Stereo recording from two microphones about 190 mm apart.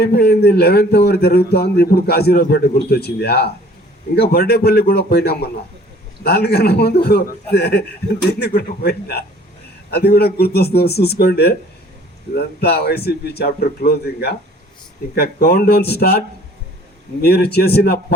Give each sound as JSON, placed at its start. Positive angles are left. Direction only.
{"t": 0.0, "sound": "a man's voice", "side_deg": 55}
{"t": 12.5, "sound": "a man's voice", "side_deg": 55}